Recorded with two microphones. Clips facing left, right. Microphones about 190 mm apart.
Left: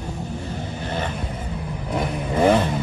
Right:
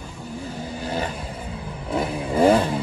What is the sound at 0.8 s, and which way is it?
Vehicle, 10° right (ahead or behind).